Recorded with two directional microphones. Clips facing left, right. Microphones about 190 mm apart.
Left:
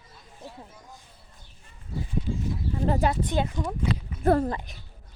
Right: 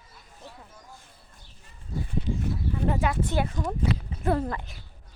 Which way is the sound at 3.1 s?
20° left (ahead or behind).